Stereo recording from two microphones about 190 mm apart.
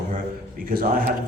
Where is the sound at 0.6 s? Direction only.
50° right (ahead or behind).